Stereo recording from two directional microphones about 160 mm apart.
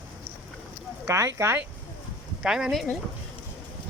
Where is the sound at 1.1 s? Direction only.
20° right (ahead or behind).